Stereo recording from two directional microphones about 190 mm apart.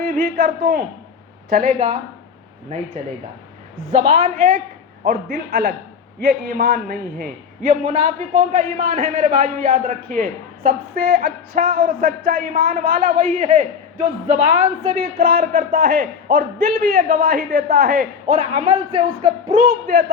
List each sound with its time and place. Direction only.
0.0 s a man's voice: 50° right (ahead or behind)
3.9 s a man's voice: 35° right (ahead or behind)
15.2 s a man's voice: 50° right (ahead or behind); by 19.0 s 30° right (ahead or behind)
19.6 s a man's voice: 55° right (ahead or behind)